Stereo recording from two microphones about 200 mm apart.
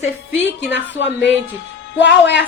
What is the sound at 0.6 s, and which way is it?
A woman's voice, 60° left (ahead or behind).